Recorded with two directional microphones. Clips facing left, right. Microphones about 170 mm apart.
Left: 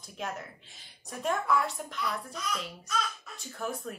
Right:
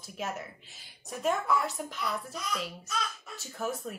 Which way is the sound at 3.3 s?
5° right (ahead or behind).